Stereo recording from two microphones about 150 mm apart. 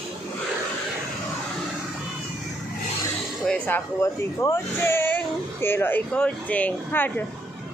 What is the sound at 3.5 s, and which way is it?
Speech, 15° left (ahead or behind).